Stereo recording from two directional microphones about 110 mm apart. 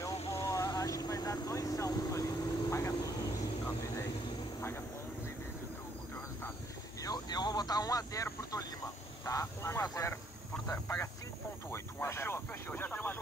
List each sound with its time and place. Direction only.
0.5 s vehicle: 30° left (ahead or behind)
7.0 s vehicle: 35° left (ahead or behind)
9.2 s speech: 30° left (ahead or behind)
11.7 s a sound: 25° left (ahead or behind)